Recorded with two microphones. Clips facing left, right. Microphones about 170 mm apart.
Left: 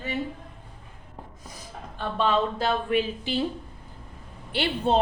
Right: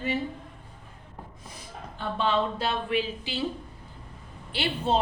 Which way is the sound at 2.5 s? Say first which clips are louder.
Left 3 dB; 45° left (ahead or behind).